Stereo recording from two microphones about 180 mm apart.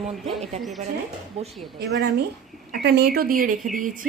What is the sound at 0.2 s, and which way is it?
Speech, centre (ahead or behind).